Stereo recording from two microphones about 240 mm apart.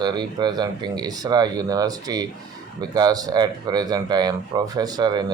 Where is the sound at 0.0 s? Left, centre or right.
Centre.